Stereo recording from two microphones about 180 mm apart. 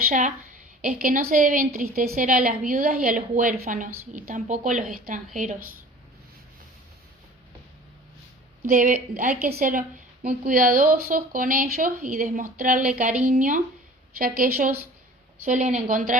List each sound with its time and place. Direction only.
0.1 s speech: 45° right (ahead or behind)
8.6 s speech: 45° right (ahead or behind)
13.0 s a woman's voice: 10° right (ahead or behind)
13.2 s speech: 50° right (ahead or behind)
15.4 s speech: 45° right (ahead or behind)